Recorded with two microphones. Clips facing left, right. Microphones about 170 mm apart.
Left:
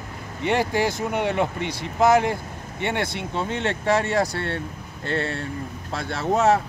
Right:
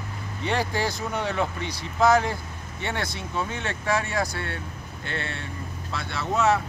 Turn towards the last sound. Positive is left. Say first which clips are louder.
# left 4 dB
turn(degrees=45)  # may be behind; listen again after turning